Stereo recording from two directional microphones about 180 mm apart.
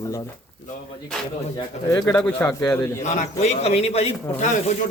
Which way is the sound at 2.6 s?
15° left (ahead or behind).